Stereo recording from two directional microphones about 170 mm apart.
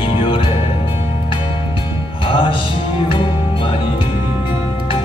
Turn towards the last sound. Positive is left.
turn(degrees=30)  # may be behind; listen again after turning